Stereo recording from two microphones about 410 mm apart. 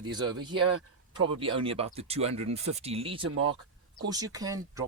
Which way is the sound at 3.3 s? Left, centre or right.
Right.